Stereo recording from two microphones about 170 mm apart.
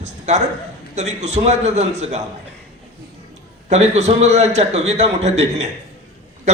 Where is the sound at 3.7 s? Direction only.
40° right (ahead or behind).